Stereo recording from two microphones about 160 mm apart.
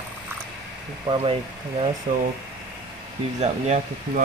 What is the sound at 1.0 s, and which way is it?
Speech, 35° right (ahead or behind).